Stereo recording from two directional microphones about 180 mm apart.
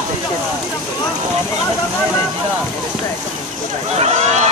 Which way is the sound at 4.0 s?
40° right (ahead or behind).